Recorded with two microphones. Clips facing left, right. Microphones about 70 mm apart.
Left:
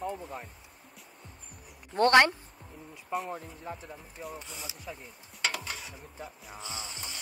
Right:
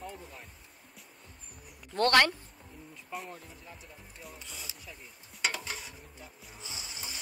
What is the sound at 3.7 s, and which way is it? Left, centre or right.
Speech, left.